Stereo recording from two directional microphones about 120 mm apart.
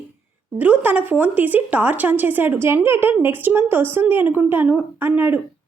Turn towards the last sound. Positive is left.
turn(degrees=-15)  # may be behind; listen again after turning